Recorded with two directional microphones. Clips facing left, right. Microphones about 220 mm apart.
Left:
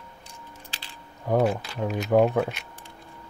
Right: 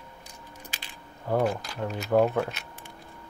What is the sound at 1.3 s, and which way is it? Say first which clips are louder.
Speech: left 3 dB; 10° left (ahead or behind).